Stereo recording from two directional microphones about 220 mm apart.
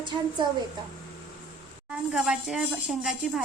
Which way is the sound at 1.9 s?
5° right (ahead or behind).